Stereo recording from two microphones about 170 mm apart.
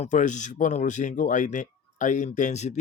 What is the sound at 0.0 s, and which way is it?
Speech, 45° left (ahead or behind).